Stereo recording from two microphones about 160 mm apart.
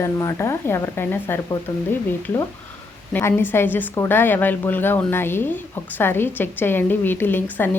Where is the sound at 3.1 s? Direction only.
10° left (ahead or behind).